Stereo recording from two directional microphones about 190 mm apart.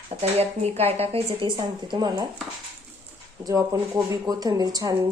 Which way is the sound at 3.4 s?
15° right (ahead or behind).